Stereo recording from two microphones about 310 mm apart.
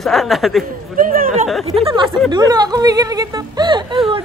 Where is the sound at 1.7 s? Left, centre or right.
Centre.